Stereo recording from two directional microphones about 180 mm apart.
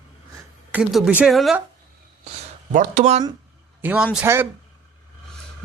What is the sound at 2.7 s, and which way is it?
Speech, 45° right (ahead or behind).